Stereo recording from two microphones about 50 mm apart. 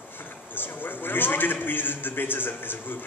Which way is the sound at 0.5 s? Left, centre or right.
Left.